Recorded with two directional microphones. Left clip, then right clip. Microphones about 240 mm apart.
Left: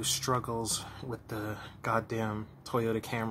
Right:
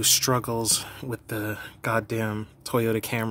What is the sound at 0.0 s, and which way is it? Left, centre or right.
Speech, right.